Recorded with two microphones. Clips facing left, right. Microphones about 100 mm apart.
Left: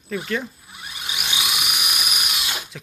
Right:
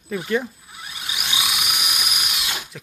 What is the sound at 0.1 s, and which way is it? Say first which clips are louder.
Speech: right 3 dB; 15° right (ahead or behind).